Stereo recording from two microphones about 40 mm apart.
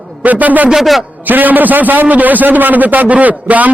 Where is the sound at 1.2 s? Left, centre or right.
Right.